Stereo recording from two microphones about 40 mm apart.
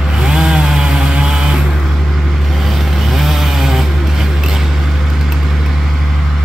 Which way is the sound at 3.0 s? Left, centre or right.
Centre.